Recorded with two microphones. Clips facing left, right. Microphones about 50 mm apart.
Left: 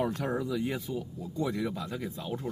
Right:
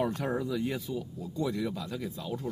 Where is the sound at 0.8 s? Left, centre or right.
Left.